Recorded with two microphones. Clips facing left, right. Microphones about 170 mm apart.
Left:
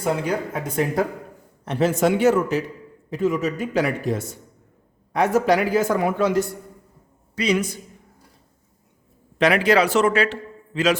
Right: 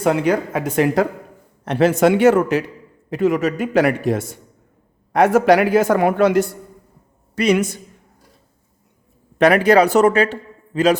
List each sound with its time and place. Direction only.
0.0 s a man's voice: 75° right (ahead or behind)
9.4 s speech: 50° right (ahead or behind)